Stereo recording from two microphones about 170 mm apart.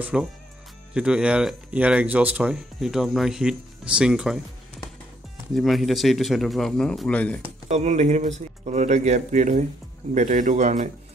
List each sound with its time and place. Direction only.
0.0 s speech: 5° right (ahead or behind)
5.5 s speech: centre (ahead or behind)
7.4 s speech: 40° right (ahead or behind)